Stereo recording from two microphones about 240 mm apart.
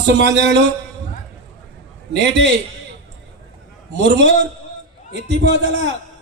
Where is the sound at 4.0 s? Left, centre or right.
Right.